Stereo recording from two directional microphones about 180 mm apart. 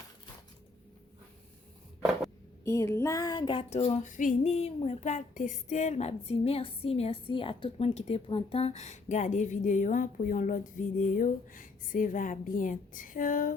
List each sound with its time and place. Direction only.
2.6 s female singing: 15° left (ahead or behind); by 13.5 s 50° left (ahead or behind)